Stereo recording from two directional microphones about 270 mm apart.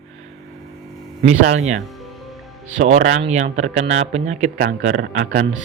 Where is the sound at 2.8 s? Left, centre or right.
Right.